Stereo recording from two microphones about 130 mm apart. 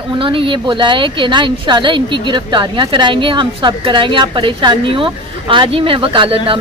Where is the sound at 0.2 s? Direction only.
40° right (ahead or behind).